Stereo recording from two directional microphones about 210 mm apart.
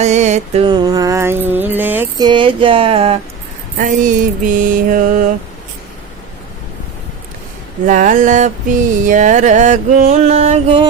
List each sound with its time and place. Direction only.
0.0 s music: 35° right (ahead or behind); by 2.2 s 10° right (ahead or behind)
2.2 s a sound: 25° right (ahead or behind)
3.8 s mantra: 40° right (ahead or behind)
7.9 s music: 40° right (ahead or behind)